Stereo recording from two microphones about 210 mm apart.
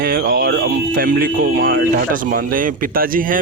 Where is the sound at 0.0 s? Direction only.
45° right (ahead or behind).